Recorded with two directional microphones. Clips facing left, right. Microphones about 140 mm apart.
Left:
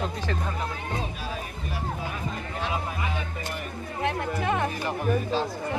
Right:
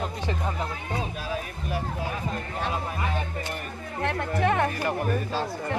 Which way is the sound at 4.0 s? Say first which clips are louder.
Right 2 dB; 60° right (ahead or behind).